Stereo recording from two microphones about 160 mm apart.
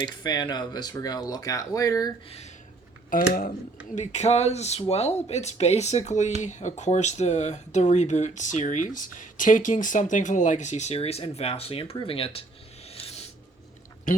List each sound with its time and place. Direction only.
0.0 s speech: 25° left (ahead or behind)
3.1 s speech: 60° left (ahead or behind)
3.9 s speech: 45° left (ahead or behind)
12.9 s a sound: 40° left (ahead or behind)